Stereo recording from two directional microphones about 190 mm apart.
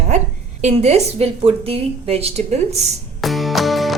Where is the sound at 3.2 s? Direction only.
Centre (ahead or behind).